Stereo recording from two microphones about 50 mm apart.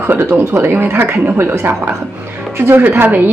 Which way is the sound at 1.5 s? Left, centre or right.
Right.